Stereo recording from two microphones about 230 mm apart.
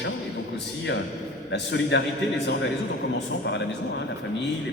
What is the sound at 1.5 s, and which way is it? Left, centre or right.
Speech, left.